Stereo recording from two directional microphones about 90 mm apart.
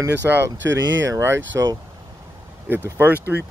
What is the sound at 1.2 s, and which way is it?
Speech, 30° right (ahead or behind).